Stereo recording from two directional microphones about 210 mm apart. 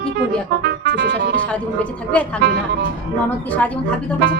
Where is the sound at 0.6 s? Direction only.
50° right (ahead or behind).